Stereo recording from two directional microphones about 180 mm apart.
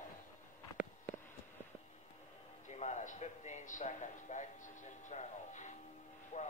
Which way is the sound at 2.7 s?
40° left (ahead or behind).